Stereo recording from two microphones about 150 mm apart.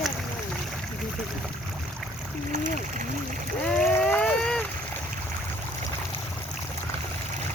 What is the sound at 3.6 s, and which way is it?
Boat, 5° left (ahead or behind).